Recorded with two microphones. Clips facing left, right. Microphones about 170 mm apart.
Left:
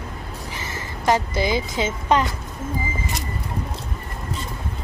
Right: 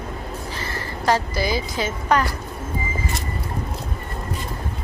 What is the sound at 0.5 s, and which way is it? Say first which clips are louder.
A woman's voice: right 3 dB; 20° left (ahead or behind).